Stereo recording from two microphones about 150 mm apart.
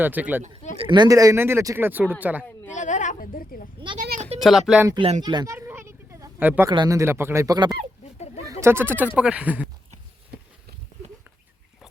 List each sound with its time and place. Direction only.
0.0 s speech: 10° right (ahead or behind)
0.8 s speech: 30° right (ahead or behind); by 2.5 s 10° right (ahead or behind)
2.7 s a woman's voice: 55° left (ahead or behind)
3.9 s speech: 80° right
4.4 s speech: centre (ahead or behind)
5.2 s speech: 25° right (ahead or behind)
5.5 s a sound: 15° right (ahead or behind)
6.7 s speech: 25° right (ahead or behind)
8.6 s speech: 15° right (ahead or behind)